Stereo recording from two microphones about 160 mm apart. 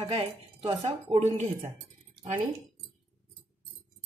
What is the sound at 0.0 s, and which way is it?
Speech, 40° right (ahead or behind).